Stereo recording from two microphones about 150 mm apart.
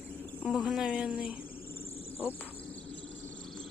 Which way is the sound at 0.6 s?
5° right (ahead or behind).